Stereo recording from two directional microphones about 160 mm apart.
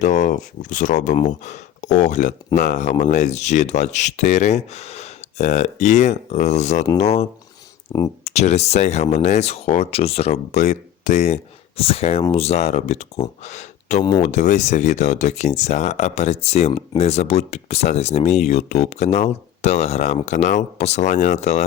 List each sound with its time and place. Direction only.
0.0 s speech: 50° left (ahead or behind)